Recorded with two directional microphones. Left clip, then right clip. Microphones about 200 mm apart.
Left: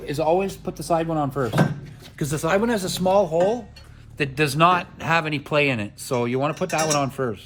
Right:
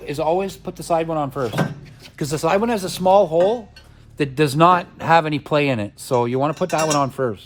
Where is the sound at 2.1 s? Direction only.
30° right (ahead or behind).